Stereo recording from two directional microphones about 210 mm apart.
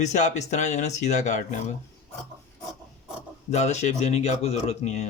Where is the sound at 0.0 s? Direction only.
35° left (ahead or behind).